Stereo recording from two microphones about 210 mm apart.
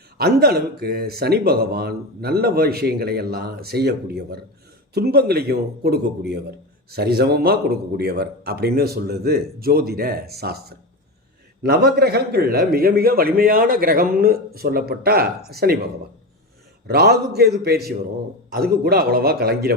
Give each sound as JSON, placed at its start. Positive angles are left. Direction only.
{"t": 0.2, "sound": "speech", "side_deg": -50}
{"t": 16.8, "sound": "speech", "side_deg": -50}